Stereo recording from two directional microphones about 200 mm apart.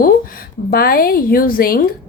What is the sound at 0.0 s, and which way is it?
A woman's voice, 45° left (ahead or behind).